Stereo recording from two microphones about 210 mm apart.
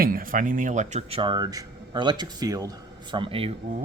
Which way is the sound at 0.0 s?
40° right (ahead or behind).